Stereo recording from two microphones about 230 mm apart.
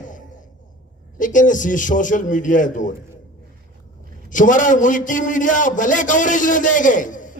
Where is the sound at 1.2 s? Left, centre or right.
Left.